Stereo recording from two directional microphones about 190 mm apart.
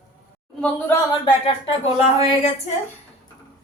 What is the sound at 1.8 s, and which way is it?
Speech, 35° left (ahead or behind).